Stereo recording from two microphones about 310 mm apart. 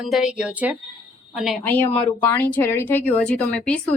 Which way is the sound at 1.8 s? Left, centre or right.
Centre.